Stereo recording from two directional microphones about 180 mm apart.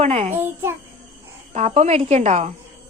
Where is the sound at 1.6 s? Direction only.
35° right (ahead or behind).